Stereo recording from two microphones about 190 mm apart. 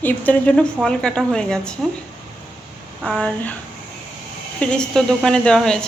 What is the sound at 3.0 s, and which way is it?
Speech, 5° left (ahead or behind).